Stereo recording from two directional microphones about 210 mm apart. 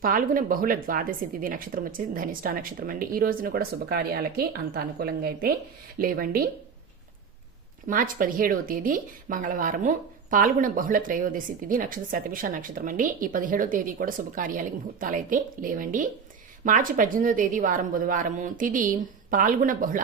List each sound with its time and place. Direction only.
0.0 s speech: 40° right (ahead or behind)
7.9 s a woman's voice: 40° right (ahead or behind)